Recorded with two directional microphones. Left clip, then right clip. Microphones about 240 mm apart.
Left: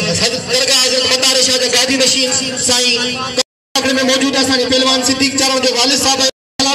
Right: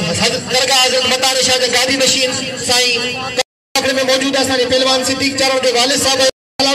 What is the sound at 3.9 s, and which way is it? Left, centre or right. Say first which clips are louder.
A man's voice: left 1 dB; left.